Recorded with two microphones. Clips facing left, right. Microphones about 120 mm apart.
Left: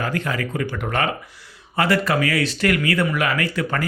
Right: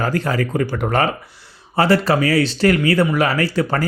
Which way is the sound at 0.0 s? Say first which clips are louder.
Right 5 dB; 35° right (ahead or behind).